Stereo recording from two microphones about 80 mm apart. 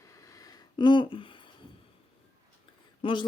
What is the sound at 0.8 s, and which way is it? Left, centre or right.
Speech, left.